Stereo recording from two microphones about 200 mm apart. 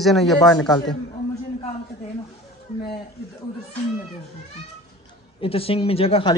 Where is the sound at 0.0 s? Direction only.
Centre (ahead or behind).